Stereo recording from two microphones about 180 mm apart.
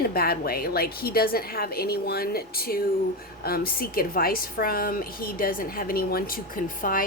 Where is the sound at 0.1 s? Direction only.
60° left (ahead or behind).